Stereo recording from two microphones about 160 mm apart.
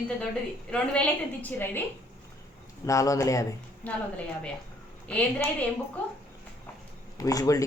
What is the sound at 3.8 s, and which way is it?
Speech, 10° left (ahead or behind).